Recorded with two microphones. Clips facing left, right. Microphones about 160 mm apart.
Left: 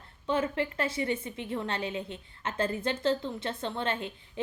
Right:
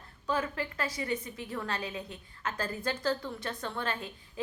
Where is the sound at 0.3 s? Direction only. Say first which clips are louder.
Left 4 dB; 25° left (ahead or behind).